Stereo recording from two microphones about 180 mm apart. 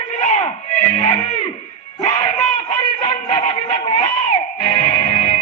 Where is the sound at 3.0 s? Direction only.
30° left (ahead or behind).